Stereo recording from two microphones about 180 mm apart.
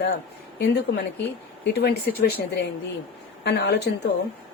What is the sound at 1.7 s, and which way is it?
A woman's voice, 65° left (ahead or behind).